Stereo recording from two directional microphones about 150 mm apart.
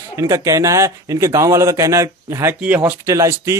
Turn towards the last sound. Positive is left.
turn(degrees=-20)  # may be behind; listen again after turning